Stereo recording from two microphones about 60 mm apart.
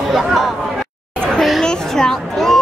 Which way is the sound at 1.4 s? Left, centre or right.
Centre.